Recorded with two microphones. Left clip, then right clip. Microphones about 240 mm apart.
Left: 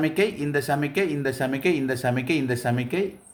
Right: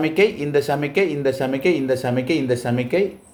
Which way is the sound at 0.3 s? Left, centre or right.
Left.